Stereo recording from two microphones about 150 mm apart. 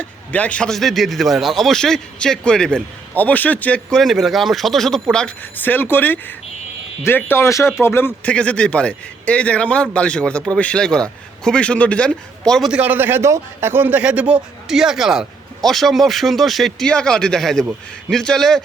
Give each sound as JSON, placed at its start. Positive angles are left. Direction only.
{"t": 0.0, "sound": "a man's voice", "side_deg": 10}